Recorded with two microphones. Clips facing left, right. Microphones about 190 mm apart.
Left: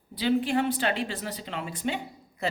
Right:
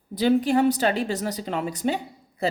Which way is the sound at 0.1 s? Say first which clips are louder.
Right 5 dB; 45° right (ahead or behind).